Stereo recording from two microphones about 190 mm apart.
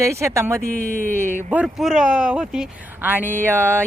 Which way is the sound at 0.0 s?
15° right (ahead or behind).